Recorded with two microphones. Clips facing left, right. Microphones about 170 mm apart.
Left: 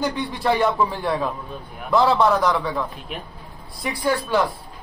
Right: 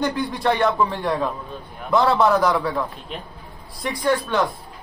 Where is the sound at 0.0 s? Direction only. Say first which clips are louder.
Right 1 dB; centre (ahead or behind).